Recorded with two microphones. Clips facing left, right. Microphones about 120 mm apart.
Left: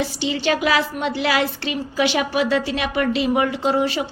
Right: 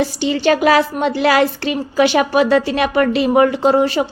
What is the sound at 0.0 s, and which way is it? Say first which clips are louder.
A woman's voice: right 6 dB; 45° right (ahead or behind).